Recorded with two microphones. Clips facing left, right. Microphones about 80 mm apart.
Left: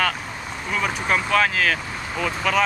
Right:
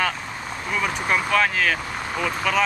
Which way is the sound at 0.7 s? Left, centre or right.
Centre.